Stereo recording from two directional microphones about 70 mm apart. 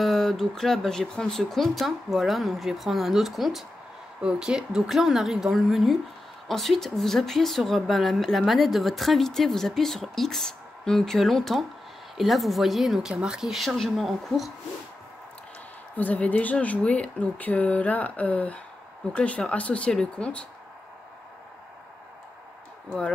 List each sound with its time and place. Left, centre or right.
0.0 s speech: centre
16.0 s speech: left